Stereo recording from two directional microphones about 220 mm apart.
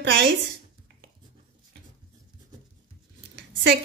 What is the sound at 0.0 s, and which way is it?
Speech, 50° right (ahead or behind).